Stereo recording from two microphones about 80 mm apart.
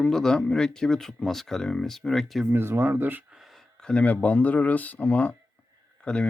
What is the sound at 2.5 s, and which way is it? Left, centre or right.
Speech, right.